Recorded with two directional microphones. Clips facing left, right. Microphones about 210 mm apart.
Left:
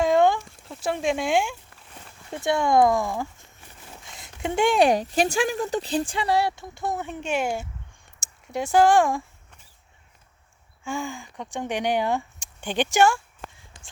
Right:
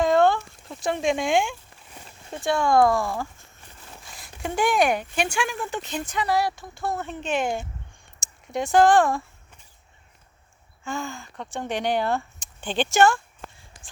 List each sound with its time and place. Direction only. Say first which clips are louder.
0.0 s a sound: even; 10° left (ahead or behind)
2.3 s speech: even; 20° left (ahead or behind)
10.8 s speech: left 1 dB; 10° left (ahead or behind)